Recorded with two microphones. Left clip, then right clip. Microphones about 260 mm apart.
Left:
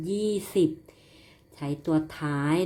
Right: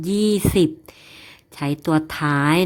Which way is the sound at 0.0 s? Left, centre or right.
Right.